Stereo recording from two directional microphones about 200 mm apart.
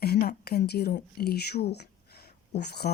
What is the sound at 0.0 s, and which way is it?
Speech, 50° left (ahead or behind).